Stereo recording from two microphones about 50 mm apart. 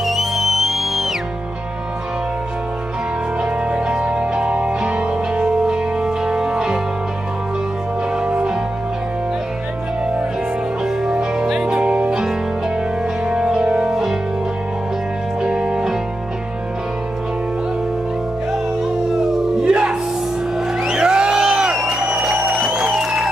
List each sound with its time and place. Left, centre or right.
0.0 s music: centre
3.6 s music: centre
8.2 s music: centre
11.1 s music: centre
15.4 s music: centre
19.6 s music: right